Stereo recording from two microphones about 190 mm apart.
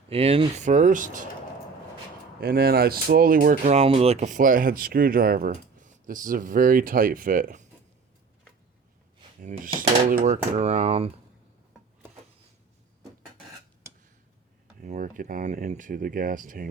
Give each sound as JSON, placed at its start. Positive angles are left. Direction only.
{"t": 0.1, "sound": "speech", "side_deg": -30}
{"t": 2.4, "sound": "speech", "side_deg": -55}
{"t": 10.1, "sound": "speech", "side_deg": -40}
{"t": 14.8, "sound": "speech", "side_deg": -40}